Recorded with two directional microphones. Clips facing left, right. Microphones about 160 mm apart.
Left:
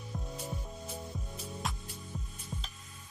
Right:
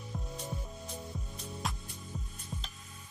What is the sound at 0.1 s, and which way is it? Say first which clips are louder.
Music: left 1 dB; centre (ahead or behind).